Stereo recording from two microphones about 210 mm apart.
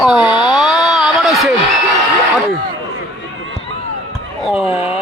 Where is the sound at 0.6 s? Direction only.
Centre (ahead or behind).